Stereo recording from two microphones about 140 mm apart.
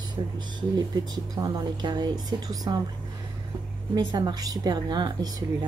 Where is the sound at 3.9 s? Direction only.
30° right (ahead or behind).